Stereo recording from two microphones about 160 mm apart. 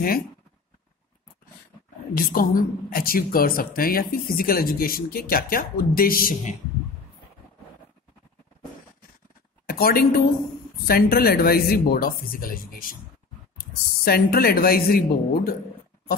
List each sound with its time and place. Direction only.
2.1 s a woman's voice: 65° left (ahead or behind)
9.7 s a woman's voice: 70° left (ahead or behind)